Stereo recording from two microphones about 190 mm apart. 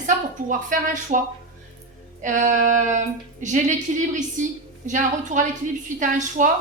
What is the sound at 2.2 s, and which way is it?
A woman's voice, 40° right (ahead or behind).